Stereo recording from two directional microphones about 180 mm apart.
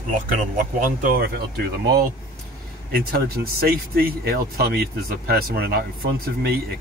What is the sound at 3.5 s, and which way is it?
Speech, 55° right (ahead or behind).